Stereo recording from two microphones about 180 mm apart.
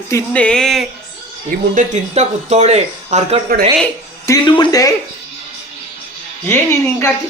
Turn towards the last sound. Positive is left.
turn(degrees=15)  # may be behind; listen again after turning